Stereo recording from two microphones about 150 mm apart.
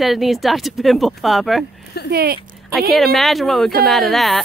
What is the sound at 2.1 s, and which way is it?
Speech, 90° right.